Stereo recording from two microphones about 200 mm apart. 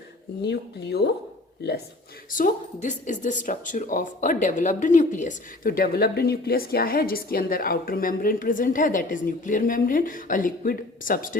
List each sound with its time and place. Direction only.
0.4 s speech: 55° left (ahead or behind)
2.3 s a woman's voice: 40° left (ahead or behind)